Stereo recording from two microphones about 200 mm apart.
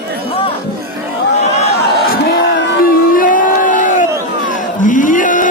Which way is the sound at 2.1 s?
55° left (ahead or behind).